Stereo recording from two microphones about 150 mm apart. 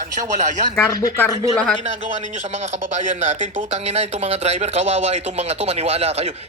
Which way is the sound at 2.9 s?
50° right (ahead or behind).